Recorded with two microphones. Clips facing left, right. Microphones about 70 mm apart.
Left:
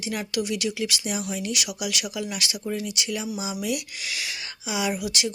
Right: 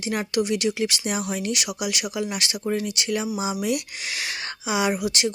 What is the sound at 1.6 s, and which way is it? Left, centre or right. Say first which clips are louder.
Speech: right 2 dB; right.